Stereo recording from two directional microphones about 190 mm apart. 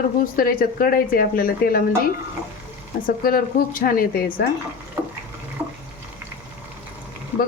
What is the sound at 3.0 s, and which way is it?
A woman's voice, 50° left (ahead or behind).